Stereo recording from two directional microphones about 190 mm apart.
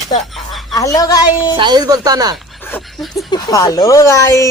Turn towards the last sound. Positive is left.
turn(degrees=15)  # may be behind; listen again after turning